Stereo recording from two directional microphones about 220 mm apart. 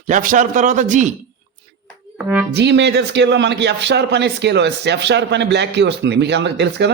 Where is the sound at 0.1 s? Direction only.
35° right (ahead or behind).